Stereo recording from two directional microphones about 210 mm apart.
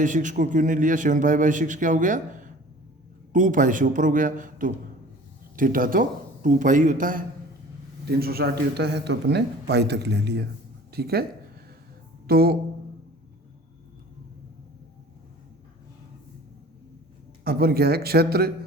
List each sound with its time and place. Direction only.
0.0 s a man's voice: 35° right (ahead or behind)
12.3 s a man's voice: 45° right (ahead or behind)
17.4 s a man's voice: 45° right (ahead or behind)